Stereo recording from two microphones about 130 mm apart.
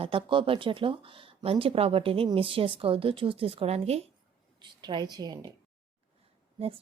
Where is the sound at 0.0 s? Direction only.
45° right (ahead or behind).